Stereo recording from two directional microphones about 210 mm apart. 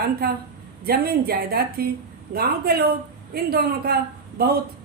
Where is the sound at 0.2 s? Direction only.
45° right (ahead or behind).